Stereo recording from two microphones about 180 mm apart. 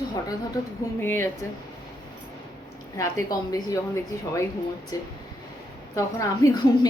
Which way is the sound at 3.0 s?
20° left (ahead or behind).